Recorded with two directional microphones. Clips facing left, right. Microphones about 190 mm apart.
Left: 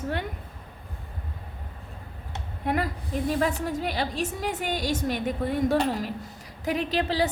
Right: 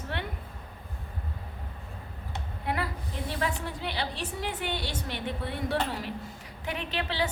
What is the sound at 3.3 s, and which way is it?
A woman's voice, 45° left (ahead or behind).